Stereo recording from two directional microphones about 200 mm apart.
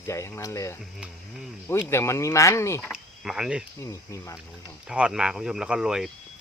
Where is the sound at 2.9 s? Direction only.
5° right (ahead or behind).